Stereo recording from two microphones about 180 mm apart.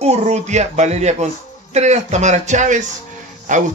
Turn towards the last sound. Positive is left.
turn(degrees=-45)  # may be behind; listen again after turning